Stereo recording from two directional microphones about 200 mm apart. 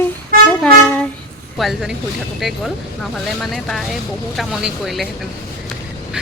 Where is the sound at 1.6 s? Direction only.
Centre (ahead or behind).